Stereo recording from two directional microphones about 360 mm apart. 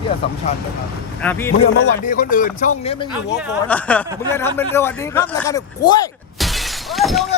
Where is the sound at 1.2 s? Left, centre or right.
Centre.